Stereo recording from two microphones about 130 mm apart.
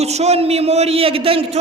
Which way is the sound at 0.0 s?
55° right (ahead or behind).